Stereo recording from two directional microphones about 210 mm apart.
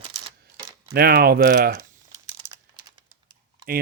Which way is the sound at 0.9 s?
50° right (ahead or behind).